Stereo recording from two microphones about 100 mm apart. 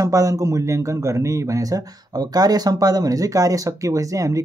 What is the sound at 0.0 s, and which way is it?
Speech, 35° right (ahead or behind).